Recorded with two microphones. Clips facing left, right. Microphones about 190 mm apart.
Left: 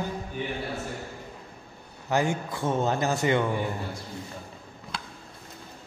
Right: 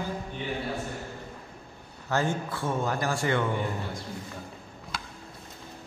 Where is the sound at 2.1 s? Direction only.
15° left (ahead or behind).